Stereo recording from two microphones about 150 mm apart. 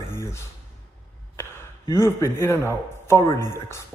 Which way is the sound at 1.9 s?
20° left (ahead or behind).